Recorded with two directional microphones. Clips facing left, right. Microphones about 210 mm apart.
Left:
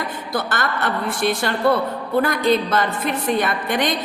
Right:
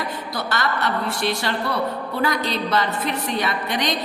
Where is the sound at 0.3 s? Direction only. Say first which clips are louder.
Left 2 dB; 50° left (ahead or behind).